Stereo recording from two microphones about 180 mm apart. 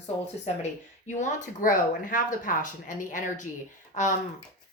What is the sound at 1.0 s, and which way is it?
Speech, 45° left (ahead or behind).